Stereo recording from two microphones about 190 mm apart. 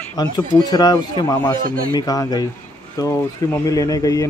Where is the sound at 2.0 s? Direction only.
20° left (ahead or behind).